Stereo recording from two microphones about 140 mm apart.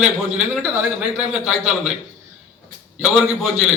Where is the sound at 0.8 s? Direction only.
5° right (ahead or behind).